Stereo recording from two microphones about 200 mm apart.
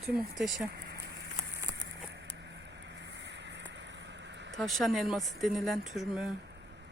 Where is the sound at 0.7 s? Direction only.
55° right (ahead or behind).